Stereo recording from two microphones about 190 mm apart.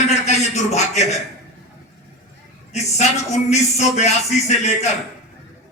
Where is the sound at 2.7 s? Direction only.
35° left (ahead or behind).